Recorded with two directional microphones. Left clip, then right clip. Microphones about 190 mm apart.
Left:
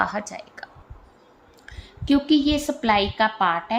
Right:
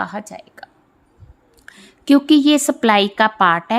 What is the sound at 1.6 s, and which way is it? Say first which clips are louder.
A woman's voice: right 7 dB; 50° right (ahead or behind).